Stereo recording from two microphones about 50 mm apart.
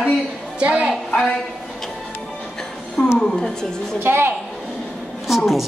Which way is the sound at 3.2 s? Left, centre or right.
Centre.